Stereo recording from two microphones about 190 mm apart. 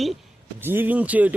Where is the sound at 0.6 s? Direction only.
10° right (ahead or behind).